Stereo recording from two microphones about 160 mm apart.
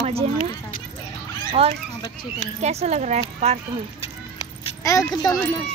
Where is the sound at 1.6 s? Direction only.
35° right (ahead or behind).